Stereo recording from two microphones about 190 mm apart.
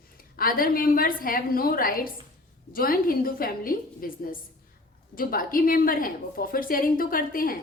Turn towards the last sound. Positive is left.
turn(degrees=50)  # may be behind; listen again after turning